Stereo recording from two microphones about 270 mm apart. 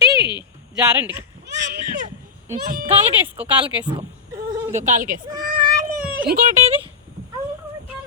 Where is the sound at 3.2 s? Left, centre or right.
Centre.